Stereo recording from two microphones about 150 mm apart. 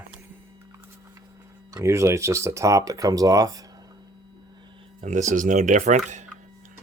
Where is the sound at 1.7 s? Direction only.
20° right (ahead or behind).